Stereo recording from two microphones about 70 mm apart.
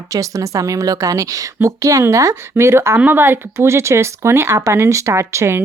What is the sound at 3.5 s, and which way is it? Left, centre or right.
A woman's voice, right.